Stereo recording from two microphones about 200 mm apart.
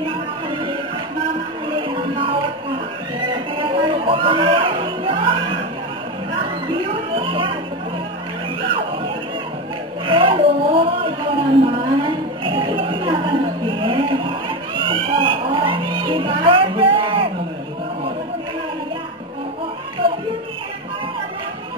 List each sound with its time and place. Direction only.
1.7 s music: 25° right (ahead or behind)
6.7 s music: 25° right (ahead or behind)
8.6 s music: 25° right (ahead or behind)
10.0 s a sound: 25° right (ahead or behind)
14.8 s music: 25° right (ahead or behind)